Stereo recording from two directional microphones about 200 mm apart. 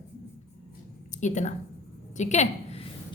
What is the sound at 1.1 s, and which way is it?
A woman's voice, 35° left (ahead or behind).